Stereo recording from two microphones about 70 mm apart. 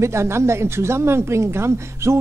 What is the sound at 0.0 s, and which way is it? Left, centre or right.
Speech, right.